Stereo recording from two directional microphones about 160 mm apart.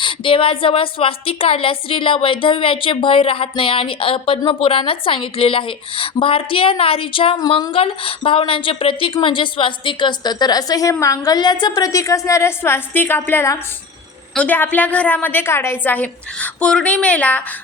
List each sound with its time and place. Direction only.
0.0 s a woman's voice: 30° left (ahead or behind); by 17.4 s 10° left (ahead or behind)